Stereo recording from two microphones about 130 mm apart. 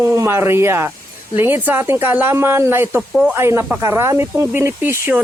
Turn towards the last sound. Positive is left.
turn(degrees=-20)  # may be behind; listen again after turning